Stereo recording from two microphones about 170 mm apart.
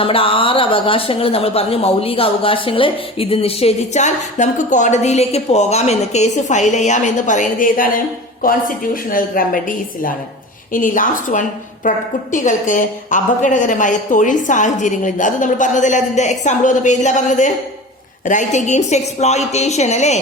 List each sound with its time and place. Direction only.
0.0 s a woman's voice: 30° left (ahead or behind)